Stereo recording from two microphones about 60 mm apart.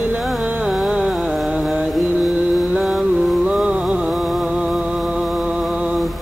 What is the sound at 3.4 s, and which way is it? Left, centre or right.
Music, centre.